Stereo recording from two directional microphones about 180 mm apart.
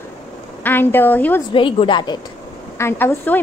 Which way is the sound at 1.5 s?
30° left (ahead or behind).